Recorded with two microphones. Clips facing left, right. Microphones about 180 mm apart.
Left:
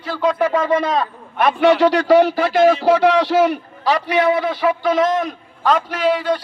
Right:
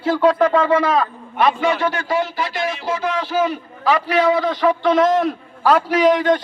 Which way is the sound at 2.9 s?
75° left (ahead or behind).